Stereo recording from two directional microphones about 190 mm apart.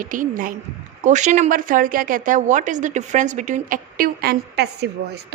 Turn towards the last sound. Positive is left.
turn(degrees=-60)  # may be behind; listen again after turning